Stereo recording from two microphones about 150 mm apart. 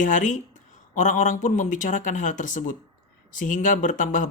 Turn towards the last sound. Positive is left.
turn(degrees=60)  # may be behind; listen again after turning